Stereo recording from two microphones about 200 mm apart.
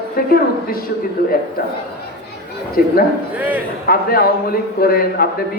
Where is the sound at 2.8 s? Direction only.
45° left (ahead or behind).